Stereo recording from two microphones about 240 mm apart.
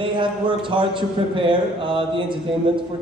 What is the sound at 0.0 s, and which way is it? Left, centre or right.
A man's voice, centre.